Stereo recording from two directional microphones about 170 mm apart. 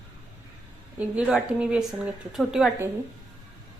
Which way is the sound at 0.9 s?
10° right (ahead or behind).